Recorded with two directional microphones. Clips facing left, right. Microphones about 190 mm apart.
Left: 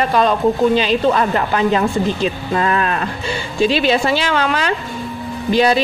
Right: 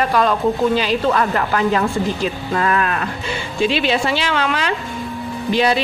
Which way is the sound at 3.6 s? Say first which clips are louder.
Left 3 dB; 40° left (ahead or behind).